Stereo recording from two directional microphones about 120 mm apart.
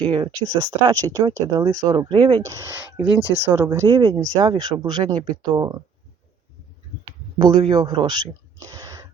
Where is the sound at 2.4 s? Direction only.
25° right (ahead or behind).